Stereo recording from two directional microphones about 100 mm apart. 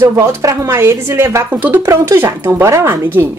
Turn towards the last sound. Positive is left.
turn(degrees=-25)  # may be behind; listen again after turning